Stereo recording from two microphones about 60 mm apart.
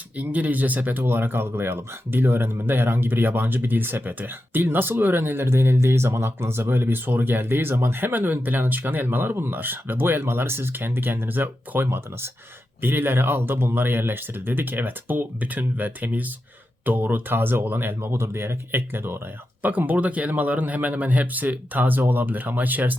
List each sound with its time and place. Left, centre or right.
0.2 s speech: right
19.6 s a man's voice: right